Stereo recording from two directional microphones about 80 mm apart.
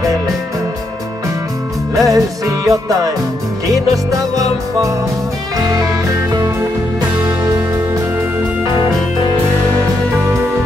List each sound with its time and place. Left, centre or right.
2.0 s music: right
7.4 s music: right